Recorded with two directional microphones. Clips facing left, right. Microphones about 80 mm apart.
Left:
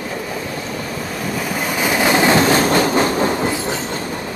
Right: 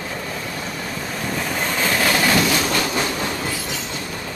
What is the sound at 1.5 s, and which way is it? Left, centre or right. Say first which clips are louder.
Train: left 3 dB; centre.